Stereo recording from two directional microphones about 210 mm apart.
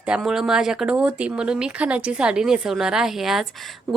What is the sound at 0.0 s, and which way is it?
Speech, 5° right (ahead or behind).